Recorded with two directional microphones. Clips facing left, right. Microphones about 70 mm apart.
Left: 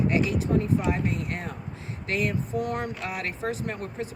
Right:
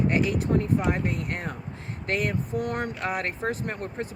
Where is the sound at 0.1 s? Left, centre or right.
Right.